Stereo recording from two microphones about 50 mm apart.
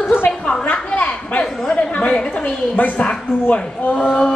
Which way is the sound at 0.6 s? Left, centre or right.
Left.